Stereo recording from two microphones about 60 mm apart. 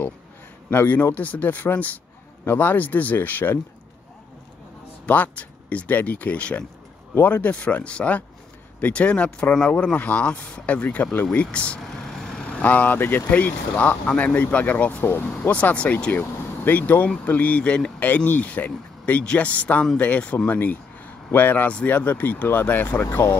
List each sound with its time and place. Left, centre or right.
0.7 s speech: left
5.0 s speech: left
11.8 s speech: centre; by 15.0 s left
15.0 s speech: left
15.5 s speech: left
18.0 s speech: left
20.5 s speech: left